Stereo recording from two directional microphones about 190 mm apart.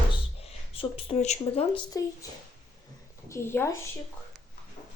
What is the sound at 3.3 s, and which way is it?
Speech, 10° left (ahead or behind).